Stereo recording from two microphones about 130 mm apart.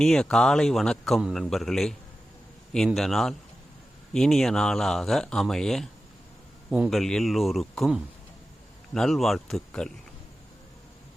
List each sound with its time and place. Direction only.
0.0 s a man's voice: 5° left (ahead or behind)